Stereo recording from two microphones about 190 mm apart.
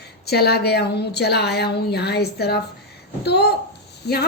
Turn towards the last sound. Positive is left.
turn(degrees=60)  # may be behind; listen again after turning